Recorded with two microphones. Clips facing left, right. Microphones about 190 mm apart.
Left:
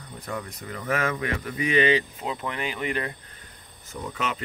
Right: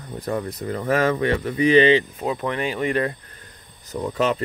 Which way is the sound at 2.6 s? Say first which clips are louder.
Right 7 dB; 45° right (ahead or behind).